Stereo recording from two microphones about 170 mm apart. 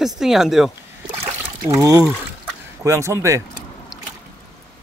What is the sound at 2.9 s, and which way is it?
Speech, 15° right (ahead or behind).